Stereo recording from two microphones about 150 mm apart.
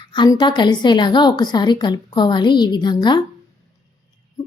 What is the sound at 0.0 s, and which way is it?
A woman's voice, 30° left (ahead or behind).